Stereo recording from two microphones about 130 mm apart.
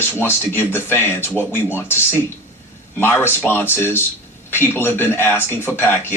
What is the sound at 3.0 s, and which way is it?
Speech, 15° left (ahead or behind).